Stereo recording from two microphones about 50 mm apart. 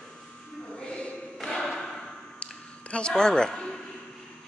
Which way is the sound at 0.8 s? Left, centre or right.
Left.